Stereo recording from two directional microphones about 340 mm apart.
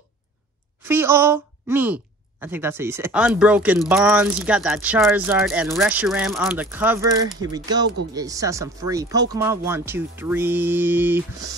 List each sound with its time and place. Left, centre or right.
0.8 s speech: centre